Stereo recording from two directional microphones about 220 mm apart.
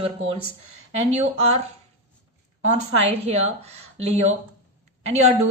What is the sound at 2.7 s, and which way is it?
A woman's voice, 30° right (ahead or behind).